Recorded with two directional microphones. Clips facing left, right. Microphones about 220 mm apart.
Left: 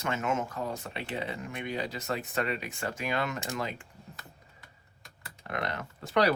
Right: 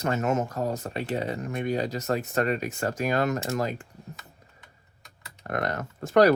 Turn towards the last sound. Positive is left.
turn(degrees=-45)  # may be behind; listen again after turning